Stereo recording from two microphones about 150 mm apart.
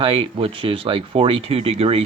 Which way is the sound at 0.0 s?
35° right (ahead or behind).